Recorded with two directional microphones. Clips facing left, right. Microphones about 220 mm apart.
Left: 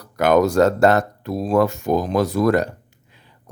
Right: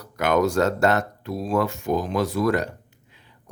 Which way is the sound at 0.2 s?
35° left (ahead or behind).